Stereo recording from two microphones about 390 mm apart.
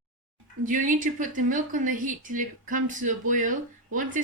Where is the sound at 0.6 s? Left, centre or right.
Centre.